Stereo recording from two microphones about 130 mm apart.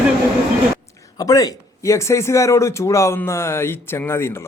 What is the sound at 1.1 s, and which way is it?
Speech, 30° left (ahead or behind).